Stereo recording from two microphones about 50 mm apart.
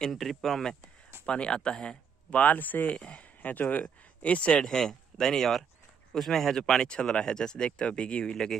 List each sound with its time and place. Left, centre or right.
0.1 s speech: centre
1.2 s speech: centre
2.4 s speech: left
2.9 s speech: left
3.4 s speech: left
4.6 s speech: centre